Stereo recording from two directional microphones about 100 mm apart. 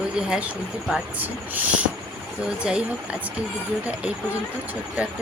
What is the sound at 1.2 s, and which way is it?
Speech, 15° right (ahead or behind).